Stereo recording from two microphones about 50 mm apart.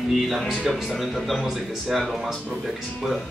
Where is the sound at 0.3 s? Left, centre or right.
Centre.